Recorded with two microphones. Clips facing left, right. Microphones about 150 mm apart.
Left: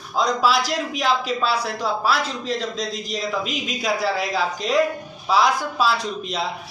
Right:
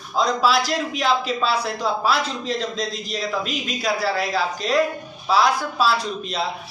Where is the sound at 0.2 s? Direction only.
10° left (ahead or behind).